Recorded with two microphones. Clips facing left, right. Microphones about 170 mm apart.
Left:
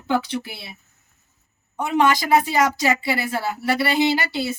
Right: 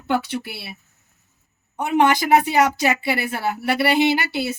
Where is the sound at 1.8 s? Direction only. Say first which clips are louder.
Right 1 dB; 60° right (ahead or behind).